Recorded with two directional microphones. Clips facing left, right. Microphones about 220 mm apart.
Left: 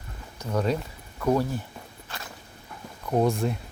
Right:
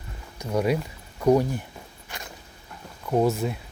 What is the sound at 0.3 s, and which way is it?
Speech, 10° right (ahead or behind).